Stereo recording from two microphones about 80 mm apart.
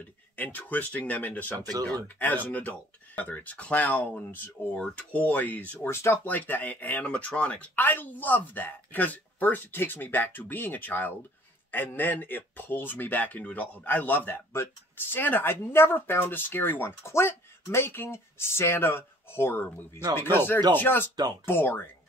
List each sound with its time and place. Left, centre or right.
0.4 s speech: left
1.7 s speech: right
2.1 s speech: left
5.9 s speech: left
6.3 s speech: left